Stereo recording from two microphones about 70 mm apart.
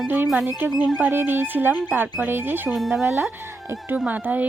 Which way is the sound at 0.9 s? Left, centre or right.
Right.